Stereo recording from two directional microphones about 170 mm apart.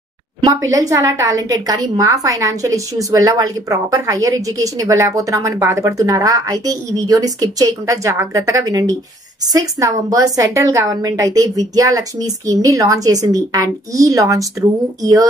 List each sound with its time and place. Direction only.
0.4 s a woman's voice: 20° right (ahead or behind)